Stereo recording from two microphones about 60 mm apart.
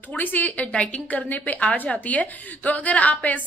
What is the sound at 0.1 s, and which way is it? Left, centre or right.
A woman's voice, left.